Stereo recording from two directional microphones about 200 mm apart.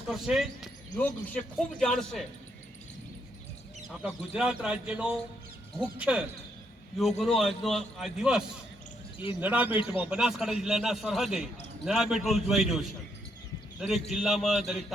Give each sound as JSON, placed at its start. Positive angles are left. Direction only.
{"t": 0.1, "sound": "a man's voice", "side_deg": 0}
{"t": 3.8, "sound": "a man's voice", "side_deg": -5}
{"t": 9.7, "sound": "a man's voice", "side_deg": 25}
{"t": 10.0, "sound": "a man's voice", "side_deg": -5}